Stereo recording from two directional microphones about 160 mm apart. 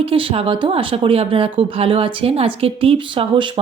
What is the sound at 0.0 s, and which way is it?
Speech, 35° right (ahead or behind).